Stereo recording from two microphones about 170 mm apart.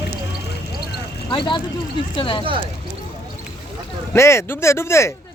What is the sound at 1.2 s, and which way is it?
Speech, 30° left (ahead or behind).